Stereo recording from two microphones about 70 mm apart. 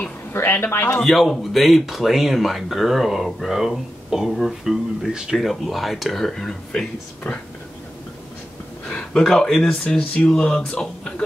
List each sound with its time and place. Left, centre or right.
0.3 s speech: left
1.0 s speech: centre
8.8 s speech: centre